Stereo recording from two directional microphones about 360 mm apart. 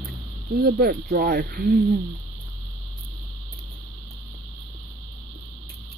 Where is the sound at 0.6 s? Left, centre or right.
Right.